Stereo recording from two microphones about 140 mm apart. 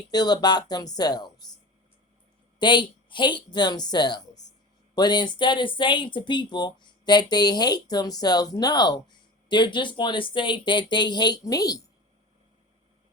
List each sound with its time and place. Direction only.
0.1 s speech: 30° left (ahead or behind)
2.6 s speech: 35° left (ahead or behind)